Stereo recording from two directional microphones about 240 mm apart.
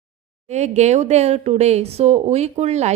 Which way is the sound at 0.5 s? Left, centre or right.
Right.